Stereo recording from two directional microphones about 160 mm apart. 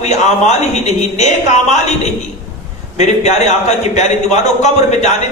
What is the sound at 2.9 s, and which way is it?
A man's voice, 45° left (ahead or behind).